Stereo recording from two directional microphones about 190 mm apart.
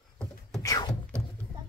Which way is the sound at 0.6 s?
20° left (ahead or behind).